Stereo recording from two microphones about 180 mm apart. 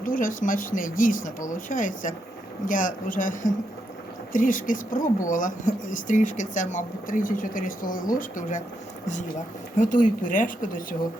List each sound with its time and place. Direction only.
0.0 s a woman's voice: 50° left (ahead or behind)
9.7 s a woman's voice: 45° left (ahead or behind)